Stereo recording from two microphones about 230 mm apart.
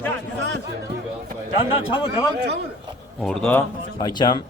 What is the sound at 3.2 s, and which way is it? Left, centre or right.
Speech, centre.